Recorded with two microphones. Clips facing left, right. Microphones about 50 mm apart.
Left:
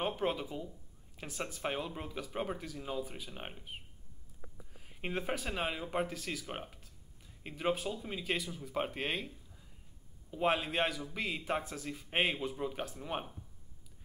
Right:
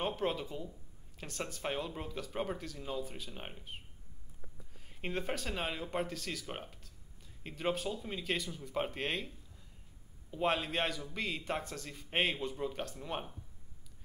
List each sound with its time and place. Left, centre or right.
0.0 s speech: centre
4.7 s speech: centre
10.3 s a man's voice: centre